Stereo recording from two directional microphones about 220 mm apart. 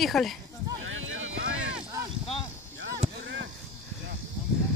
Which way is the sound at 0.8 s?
65° right (ahead or behind).